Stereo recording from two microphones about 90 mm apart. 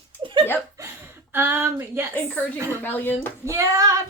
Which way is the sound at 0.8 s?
25° right (ahead or behind).